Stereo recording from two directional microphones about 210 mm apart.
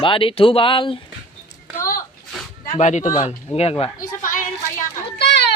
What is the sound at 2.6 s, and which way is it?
Speech, 35° left (ahead or behind).